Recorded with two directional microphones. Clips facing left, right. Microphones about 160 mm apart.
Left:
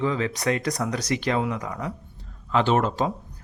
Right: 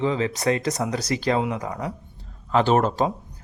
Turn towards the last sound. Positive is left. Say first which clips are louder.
# right 2 dB
turn(degrees=-40)  # may be behind; listen again after turning